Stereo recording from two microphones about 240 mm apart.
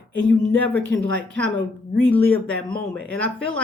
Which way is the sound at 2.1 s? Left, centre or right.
Centre.